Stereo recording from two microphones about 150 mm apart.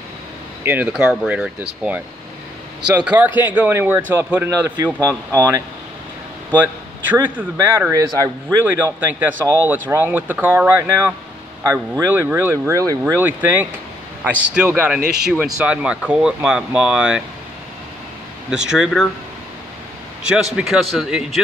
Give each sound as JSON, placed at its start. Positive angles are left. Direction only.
{"t": 0.7, "sound": "speech", "side_deg": -10}
{"t": 3.1, "sound": "speech", "side_deg": -10}
{"t": 6.5, "sound": "a man's voice", "side_deg": -10}
{"t": 13.0, "sound": "speech", "side_deg": -10}
{"t": 18.5, "sound": "speech", "side_deg": -5}
{"t": 20.2, "sound": "speech", "side_deg": -5}